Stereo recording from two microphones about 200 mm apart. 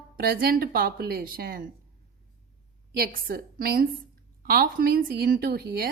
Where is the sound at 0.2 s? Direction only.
50° right (ahead or behind).